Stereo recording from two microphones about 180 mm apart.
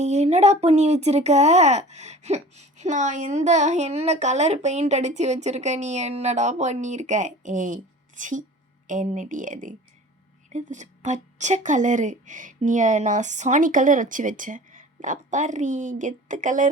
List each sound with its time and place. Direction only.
0.0 s speech: 40° right (ahead or behind)